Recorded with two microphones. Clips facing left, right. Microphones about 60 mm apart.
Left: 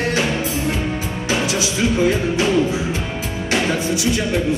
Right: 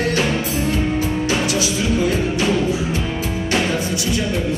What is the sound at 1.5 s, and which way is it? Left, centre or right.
Music, left.